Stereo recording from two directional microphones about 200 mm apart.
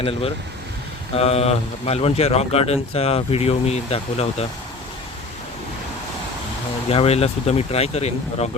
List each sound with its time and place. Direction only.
0.0 s speech: 30° left (ahead or behind)
6.8 s speech: 30° left (ahead or behind)